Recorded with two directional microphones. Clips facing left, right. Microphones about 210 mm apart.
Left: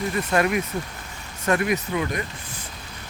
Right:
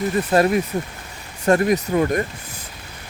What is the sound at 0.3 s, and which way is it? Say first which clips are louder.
Speech: right 5 dB; 35° right (ahead or behind).